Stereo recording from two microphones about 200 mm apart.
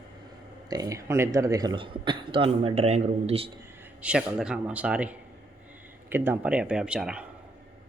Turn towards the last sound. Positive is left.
turn(degrees=-5)  # may be behind; listen again after turning